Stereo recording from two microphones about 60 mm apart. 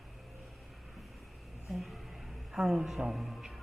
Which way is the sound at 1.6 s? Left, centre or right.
Centre.